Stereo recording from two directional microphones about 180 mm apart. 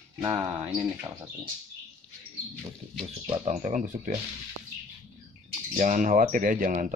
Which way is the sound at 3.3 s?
35° right (ahead or behind).